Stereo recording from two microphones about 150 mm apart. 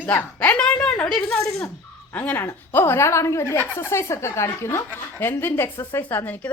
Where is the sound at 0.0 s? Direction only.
10° left (ahead or behind).